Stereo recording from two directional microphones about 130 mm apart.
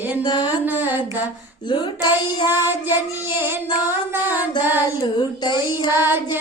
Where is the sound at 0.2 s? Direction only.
35° left (ahead or behind).